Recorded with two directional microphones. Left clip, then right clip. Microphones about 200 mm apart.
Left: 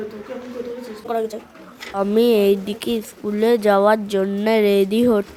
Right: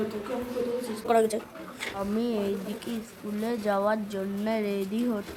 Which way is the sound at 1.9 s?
40° left (ahead or behind).